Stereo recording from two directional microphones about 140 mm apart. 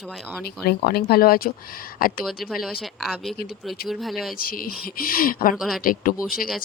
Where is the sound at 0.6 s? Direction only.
90° left.